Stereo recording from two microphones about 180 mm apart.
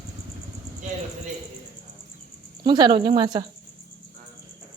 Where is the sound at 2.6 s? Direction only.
25° right (ahead or behind).